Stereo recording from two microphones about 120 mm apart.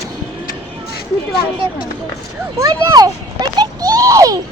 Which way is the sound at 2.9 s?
35° right (ahead or behind).